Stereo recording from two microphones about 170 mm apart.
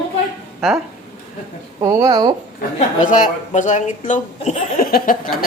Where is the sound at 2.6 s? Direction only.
50° left (ahead or behind).